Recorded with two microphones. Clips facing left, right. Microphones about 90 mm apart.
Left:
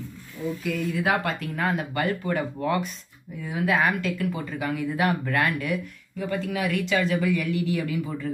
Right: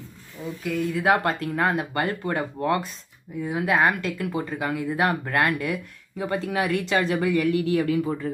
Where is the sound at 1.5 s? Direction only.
40° right (ahead or behind).